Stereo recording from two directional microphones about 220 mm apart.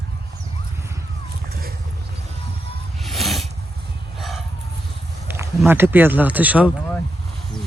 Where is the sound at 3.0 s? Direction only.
Centre (ahead or behind).